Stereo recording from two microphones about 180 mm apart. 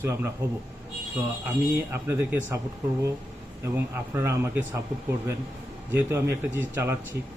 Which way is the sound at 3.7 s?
15° right (ahead or behind).